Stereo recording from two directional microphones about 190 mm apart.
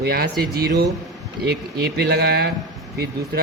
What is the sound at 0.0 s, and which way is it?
Speech, 55° right (ahead or behind).